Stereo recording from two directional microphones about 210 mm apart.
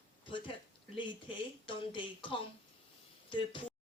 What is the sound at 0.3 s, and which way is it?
Speech, 25° left (ahead or behind).